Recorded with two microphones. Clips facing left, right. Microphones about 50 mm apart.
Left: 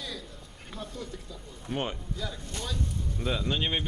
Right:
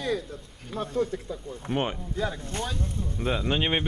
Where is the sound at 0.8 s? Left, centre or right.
Right.